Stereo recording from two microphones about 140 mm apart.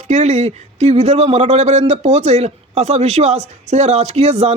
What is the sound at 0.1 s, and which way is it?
A man's voice, 50° right (ahead or behind).